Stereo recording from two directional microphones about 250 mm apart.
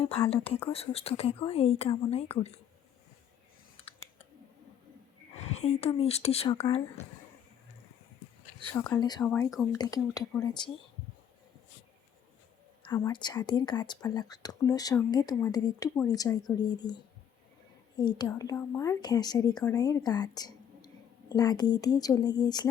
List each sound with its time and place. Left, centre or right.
0.0 s a woman's voice: left
5.3 s speech: left
8.7 s speech: centre
9.7 s speech: centre
12.8 s a woman's voice: centre